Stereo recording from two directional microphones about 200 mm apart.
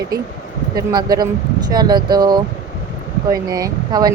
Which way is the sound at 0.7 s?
20° right (ahead or behind).